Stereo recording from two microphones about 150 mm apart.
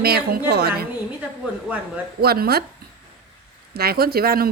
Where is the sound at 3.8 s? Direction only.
90° right.